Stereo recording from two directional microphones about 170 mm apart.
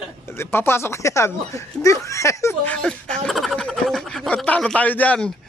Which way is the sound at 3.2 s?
Centre (ahead or behind).